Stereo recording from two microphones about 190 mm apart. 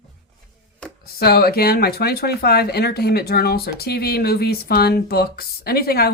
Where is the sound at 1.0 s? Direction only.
55° left (ahead or behind).